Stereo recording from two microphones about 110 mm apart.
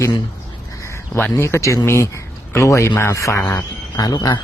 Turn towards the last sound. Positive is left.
turn(degrees=40)  # may be behind; listen again after turning